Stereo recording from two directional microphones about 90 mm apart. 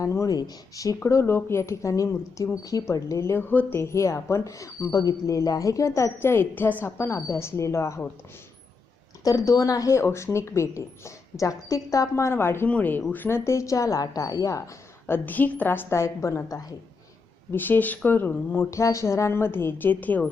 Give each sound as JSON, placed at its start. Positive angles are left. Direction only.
{"t": 0.0, "sound": "a woman's voice", "side_deg": 35}
{"t": 1.0, "sound": "a woman's voice", "side_deg": 30}
{"t": 9.2, "sound": "a woman's voice", "side_deg": 40}
{"t": 15.0, "sound": "speech", "side_deg": 20}
{"t": 17.5, "sound": "speech", "side_deg": 20}